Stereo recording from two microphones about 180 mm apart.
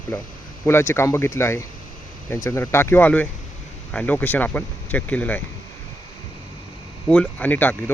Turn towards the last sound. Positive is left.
turn(degrees=10)  # may be behind; listen again after turning